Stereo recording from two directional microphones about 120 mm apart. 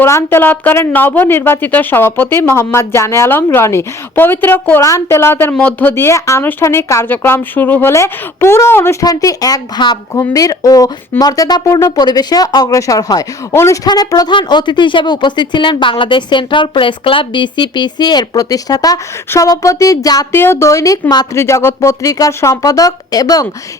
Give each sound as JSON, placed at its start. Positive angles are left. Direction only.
{"t": 0.0, "sound": "a woman's voice", "side_deg": 20}
{"t": 13.8, "sound": "speech", "side_deg": 35}